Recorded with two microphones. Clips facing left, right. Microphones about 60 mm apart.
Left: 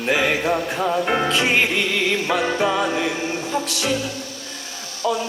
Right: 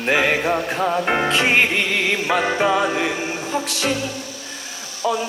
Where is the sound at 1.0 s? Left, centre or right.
Right.